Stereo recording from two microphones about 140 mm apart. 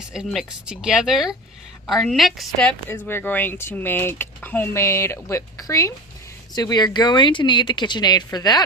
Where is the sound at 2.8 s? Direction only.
15° left (ahead or behind).